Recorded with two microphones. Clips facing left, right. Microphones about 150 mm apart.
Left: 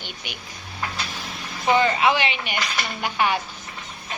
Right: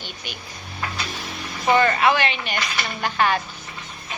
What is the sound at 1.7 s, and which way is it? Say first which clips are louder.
A woman's voice: right 1 dB; 15° left (ahead or behind).